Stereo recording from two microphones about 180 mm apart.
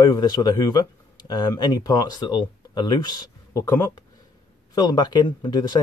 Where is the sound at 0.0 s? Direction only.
20° left (ahead or behind).